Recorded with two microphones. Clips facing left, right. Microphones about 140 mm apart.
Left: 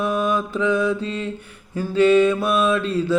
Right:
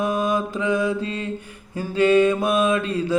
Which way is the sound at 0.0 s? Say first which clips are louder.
Left 1 dB; 10° right (ahead or behind).